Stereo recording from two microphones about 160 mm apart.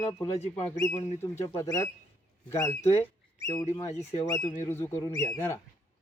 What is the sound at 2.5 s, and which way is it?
Speech, 15° left (ahead or behind).